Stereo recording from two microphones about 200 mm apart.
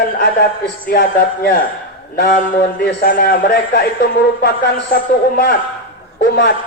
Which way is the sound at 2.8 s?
50° left (ahead or behind).